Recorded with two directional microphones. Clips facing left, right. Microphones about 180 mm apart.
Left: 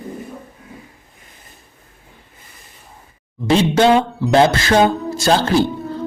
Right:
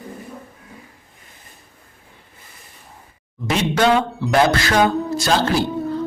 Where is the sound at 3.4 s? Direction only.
30° left (ahead or behind).